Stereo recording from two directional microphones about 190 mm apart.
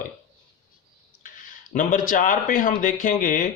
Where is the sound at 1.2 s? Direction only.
45° left (ahead or behind).